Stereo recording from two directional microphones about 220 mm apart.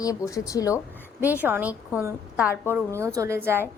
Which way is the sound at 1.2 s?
10° right (ahead or behind).